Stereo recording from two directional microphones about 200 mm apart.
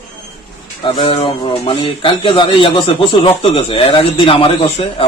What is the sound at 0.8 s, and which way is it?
A man's voice, 25° left (ahead or behind).